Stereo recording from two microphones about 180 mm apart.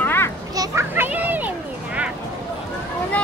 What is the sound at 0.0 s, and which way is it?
Children playing, 10° left (ahead or behind).